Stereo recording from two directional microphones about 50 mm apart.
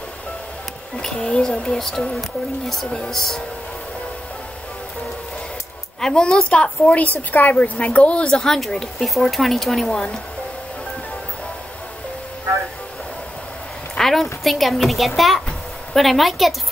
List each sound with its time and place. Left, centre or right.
1.0 s speech: centre
5.9 s a woman's voice: centre
8.5 s a woman's voice: centre
13.9 s a woman's voice: centre